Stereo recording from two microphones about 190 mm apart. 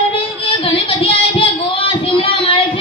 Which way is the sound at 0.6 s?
30° left (ahead or behind).